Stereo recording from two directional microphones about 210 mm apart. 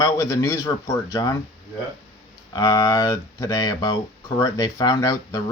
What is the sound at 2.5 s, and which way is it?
Speech, 15° left (ahead or behind).